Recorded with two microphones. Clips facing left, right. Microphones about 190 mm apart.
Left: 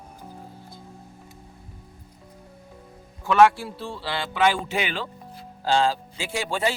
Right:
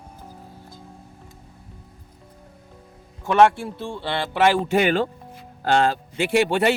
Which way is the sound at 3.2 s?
25° right (ahead or behind).